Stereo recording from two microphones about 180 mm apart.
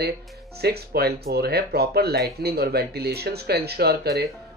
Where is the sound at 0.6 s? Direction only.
60° right (ahead or behind).